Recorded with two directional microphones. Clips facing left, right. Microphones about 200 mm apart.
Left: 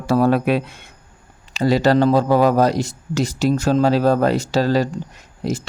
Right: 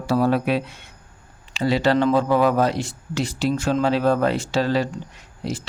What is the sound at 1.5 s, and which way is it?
Speech, 40° left (ahead or behind).